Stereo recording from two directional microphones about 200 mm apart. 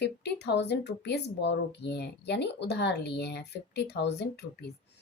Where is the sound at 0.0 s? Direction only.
55° left (ahead or behind).